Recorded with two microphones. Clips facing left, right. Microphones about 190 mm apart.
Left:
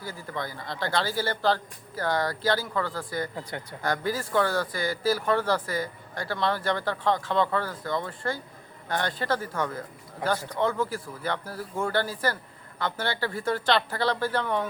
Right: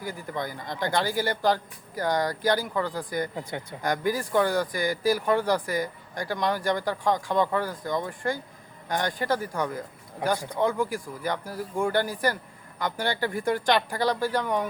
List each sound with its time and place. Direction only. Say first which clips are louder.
0.0 s speech: right 2 dB; 15° right (ahead or behind)